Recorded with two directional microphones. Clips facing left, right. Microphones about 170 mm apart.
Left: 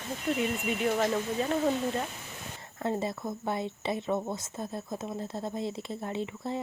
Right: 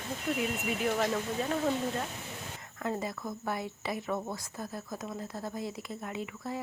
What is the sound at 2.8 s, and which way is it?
Speech, 25° left (ahead or behind).